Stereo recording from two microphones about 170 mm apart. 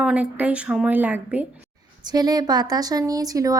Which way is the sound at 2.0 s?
25° right (ahead or behind).